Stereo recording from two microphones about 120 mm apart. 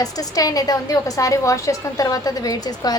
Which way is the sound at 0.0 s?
30° left (ahead or behind).